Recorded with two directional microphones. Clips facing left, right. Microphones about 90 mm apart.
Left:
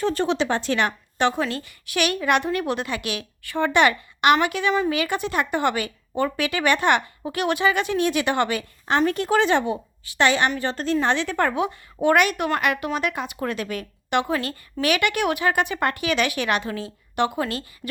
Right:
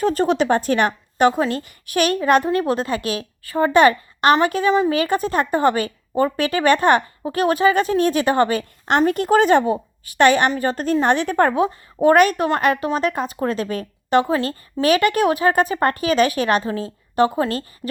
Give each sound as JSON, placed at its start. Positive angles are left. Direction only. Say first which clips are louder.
{"t": 0.0, "sound": "a woman's voice", "louder": "right 4 dB", "side_deg": -40}